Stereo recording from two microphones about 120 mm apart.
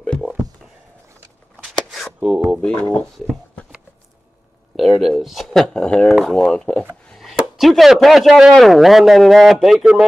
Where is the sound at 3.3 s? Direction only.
10° left (ahead or behind).